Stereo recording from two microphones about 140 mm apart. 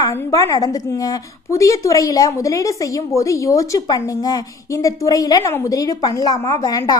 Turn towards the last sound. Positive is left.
turn(degrees=30)  # may be behind; listen again after turning